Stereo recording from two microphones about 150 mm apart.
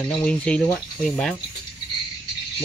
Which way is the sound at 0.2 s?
10° left (ahead or behind).